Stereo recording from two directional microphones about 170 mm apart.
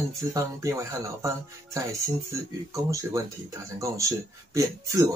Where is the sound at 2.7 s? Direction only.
20° right (ahead or behind).